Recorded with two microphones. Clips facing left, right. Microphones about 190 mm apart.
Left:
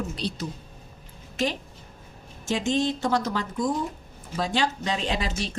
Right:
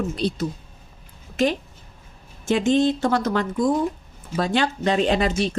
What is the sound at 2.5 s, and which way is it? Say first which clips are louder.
Speech: right 6 dB; 55° right (ahead or behind).